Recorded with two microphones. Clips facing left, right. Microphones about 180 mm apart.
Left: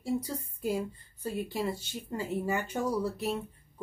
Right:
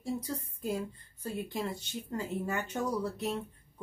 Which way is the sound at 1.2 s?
5° left (ahead or behind).